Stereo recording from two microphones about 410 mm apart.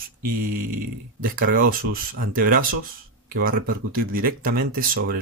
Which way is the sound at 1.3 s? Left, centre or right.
Right.